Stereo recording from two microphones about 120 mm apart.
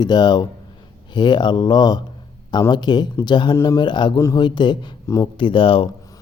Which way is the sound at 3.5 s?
25° left (ahead or behind).